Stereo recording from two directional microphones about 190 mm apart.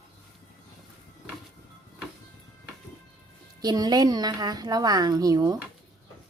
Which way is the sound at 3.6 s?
20° right (ahead or behind).